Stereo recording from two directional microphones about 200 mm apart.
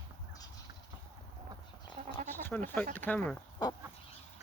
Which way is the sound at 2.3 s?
10° left (ahead or behind).